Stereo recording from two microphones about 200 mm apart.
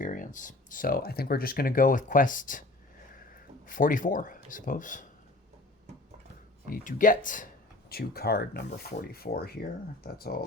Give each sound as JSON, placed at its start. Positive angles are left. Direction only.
{"t": 0.0, "sound": "speech", "side_deg": 40}
{"t": 3.7, "sound": "speech", "side_deg": 40}
{"t": 6.7, "sound": "speech", "side_deg": 45}